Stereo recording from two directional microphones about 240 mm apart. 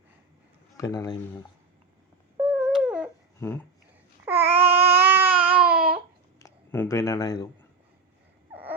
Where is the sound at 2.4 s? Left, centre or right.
Centre.